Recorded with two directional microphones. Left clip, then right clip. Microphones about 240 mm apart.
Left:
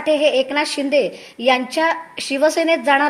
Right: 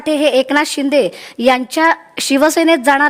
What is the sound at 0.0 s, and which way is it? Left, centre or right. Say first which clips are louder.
A woman's voice: right 3 dB; right.